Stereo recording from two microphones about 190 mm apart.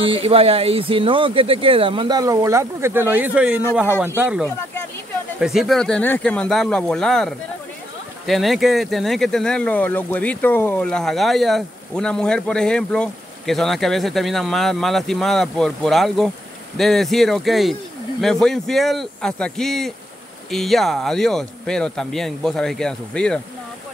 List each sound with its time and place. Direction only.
0.0 s speech: 30° right (ahead or behind); by 23.4 s 5° left (ahead or behind)